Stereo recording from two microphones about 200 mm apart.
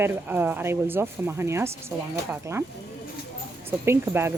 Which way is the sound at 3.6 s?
10° right (ahead or behind).